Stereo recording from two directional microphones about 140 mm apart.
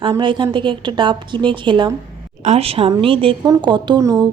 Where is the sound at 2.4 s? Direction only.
50° right (ahead or behind); by 4.3 s 30° right (ahead or behind).